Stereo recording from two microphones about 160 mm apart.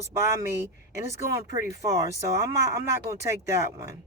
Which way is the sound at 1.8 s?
20° right (ahead or behind).